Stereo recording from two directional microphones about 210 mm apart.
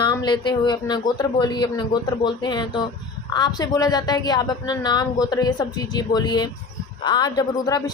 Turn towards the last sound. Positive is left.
turn(degrees=20)  # may be behind; listen again after turning